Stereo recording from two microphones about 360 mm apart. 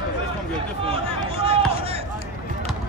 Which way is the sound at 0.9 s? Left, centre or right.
Centre.